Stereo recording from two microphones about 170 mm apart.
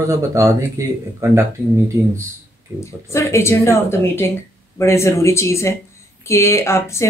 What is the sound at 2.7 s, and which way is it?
Speech, 15° left (ahead or behind).